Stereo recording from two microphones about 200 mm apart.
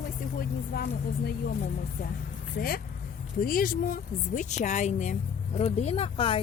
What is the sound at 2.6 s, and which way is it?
A woman's voice, 45° left (ahead or behind).